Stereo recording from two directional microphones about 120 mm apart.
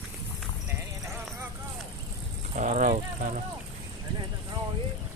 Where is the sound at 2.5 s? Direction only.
75° right (ahead or behind).